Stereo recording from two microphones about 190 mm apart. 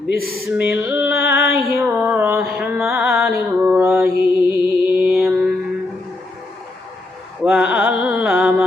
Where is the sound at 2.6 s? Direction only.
10° right (ahead or behind).